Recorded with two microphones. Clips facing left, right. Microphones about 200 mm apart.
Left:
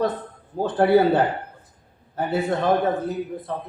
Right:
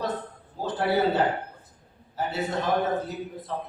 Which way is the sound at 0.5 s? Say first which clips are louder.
Left 8 dB; 55° left (ahead or behind).